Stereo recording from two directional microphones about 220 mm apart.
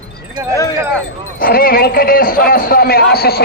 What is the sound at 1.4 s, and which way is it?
A man's voice, 40° left (ahead or behind).